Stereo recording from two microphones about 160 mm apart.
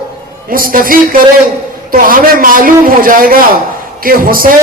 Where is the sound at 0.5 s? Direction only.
60° right (ahead or behind).